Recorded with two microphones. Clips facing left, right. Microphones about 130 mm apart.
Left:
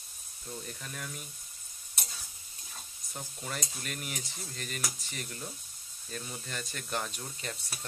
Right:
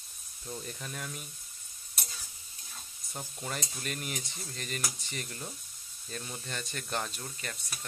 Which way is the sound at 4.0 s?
Centre (ahead or behind).